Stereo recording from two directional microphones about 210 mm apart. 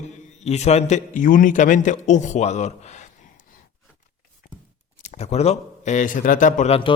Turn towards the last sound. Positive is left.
turn(degrees=30)  # may be behind; listen again after turning